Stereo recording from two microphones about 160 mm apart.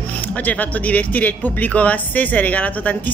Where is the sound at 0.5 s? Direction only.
10° left (ahead or behind).